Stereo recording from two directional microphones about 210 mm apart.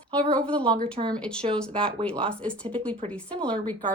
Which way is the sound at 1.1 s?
5° left (ahead or behind).